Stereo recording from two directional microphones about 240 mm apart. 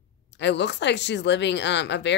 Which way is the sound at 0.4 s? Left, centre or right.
Left.